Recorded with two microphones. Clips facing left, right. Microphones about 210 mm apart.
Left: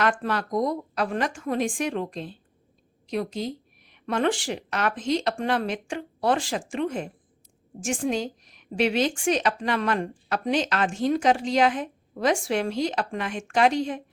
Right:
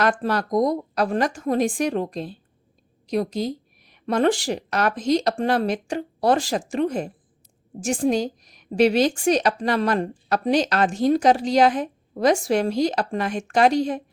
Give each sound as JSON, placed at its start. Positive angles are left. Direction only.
{"t": 0.0, "sound": "a woman's voice", "side_deg": -40}